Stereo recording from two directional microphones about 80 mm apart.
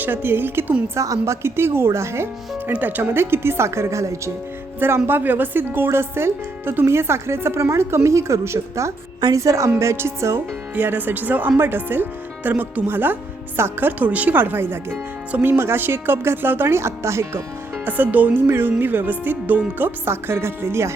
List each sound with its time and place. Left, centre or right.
0.0 s speech: right
0.9 s speech: right
2.6 s speech: right
5.0 s speech: right
10.8 s speech: right
15.5 s speech: right
17.8 s speech: right